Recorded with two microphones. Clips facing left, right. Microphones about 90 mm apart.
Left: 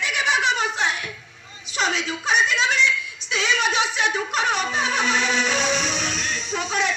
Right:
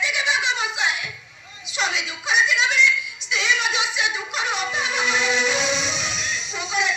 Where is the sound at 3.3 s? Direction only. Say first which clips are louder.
Left 1 dB; 40° left (ahead or behind).